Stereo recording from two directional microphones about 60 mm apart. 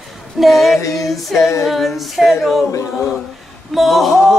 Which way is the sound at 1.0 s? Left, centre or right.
Centre.